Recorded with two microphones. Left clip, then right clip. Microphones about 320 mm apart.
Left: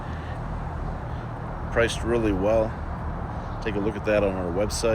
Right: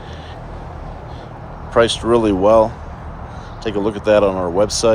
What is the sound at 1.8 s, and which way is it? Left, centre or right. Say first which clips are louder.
Speech: right 9 dB; right.